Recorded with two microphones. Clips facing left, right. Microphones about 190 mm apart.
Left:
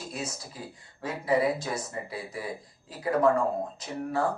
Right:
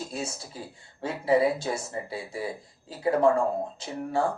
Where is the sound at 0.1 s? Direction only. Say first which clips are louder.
Right 2 dB; 30° right (ahead or behind).